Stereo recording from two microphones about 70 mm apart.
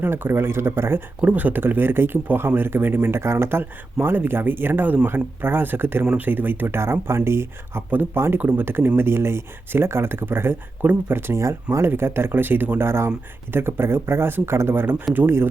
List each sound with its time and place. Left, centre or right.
0.0 s speech: right
1.2 s speech: right
7.9 s speech: right
11.3 s speech: right
11.9 s speech: right